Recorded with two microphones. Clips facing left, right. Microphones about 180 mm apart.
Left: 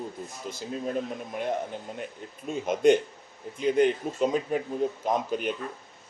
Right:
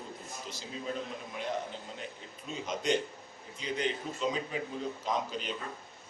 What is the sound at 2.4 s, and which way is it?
A man's voice, 55° left (ahead or behind).